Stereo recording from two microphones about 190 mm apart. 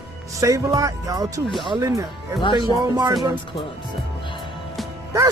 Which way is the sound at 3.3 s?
25° left (ahead or behind).